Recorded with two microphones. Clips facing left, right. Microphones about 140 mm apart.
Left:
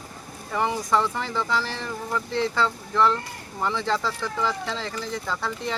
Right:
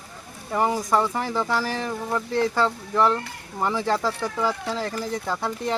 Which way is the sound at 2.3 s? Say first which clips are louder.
Right 2 dB; 50° right (ahead or behind).